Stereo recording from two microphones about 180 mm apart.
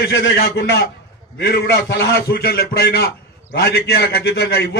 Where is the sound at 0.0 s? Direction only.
65° left (ahead or behind).